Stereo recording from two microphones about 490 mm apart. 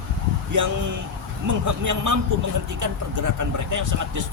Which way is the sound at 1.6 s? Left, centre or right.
Right.